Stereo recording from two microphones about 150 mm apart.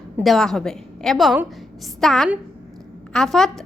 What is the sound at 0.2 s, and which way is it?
A woman's voice, centre (ahead or behind).